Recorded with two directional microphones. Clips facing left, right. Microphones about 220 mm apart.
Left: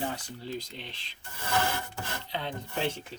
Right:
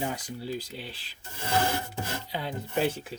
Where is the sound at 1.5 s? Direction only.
25° right (ahead or behind).